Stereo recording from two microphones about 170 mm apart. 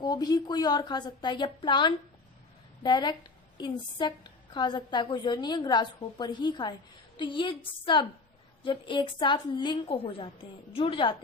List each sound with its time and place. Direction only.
0.0 s a woman's voice: 25° left (ahead or behind)